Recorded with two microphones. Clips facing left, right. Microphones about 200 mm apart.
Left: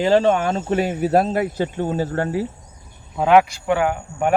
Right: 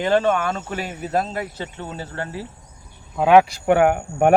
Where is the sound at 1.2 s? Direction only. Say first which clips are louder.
Left 5 dB; 50° left (ahead or behind).